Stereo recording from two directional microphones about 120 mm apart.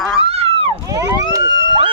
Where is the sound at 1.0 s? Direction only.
30° right (ahead or behind).